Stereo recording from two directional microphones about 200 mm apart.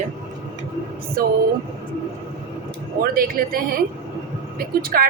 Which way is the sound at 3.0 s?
45° right (ahead or behind).